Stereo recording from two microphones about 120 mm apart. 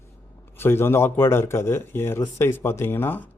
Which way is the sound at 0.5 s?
20° left (ahead or behind).